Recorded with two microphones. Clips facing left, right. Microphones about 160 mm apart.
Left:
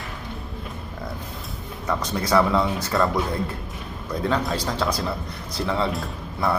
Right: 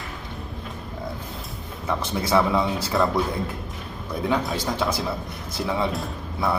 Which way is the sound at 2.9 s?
15° right (ahead or behind).